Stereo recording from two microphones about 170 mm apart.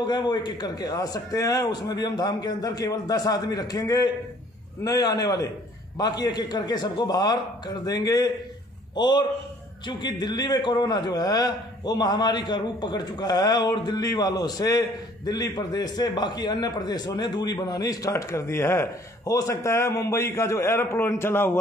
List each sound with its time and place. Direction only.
0.0 s a man's voice: 25° left (ahead or behind)